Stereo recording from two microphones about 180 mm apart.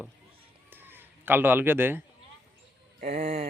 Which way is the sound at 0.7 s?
10° right (ahead or behind).